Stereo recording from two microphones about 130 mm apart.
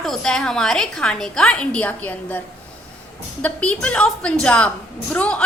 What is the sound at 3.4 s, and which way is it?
A woman's voice, 10° left (ahead or behind).